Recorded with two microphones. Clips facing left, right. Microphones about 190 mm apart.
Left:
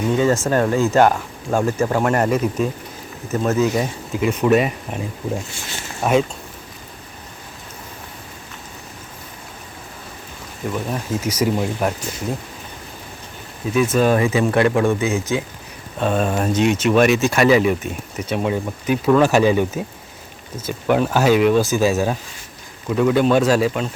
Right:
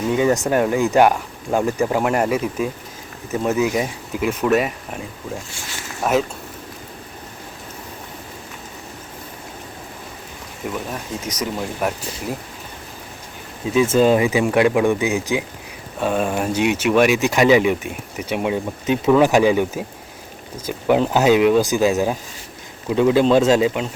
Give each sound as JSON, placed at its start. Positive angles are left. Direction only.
{"t": 0.1, "sound": "speech", "side_deg": -15}
{"t": 4.2, "sound": "speech", "side_deg": 0}
{"t": 6.0, "sound": "speech", "side_deg": -5}
{"t": 10.6, "sound": "speech", "side_deg": -10}
{"t": 11.1, "sound": "speech", "side_deg": 5}
{"t": 13.7, "sound": "speech", "side_deg": -25}